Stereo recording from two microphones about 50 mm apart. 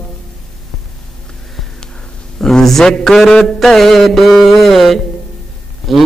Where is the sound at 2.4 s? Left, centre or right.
Centre.